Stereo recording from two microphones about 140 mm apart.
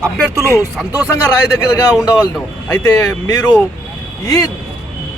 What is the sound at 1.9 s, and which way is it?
Speech, 5° right (ahead or behind).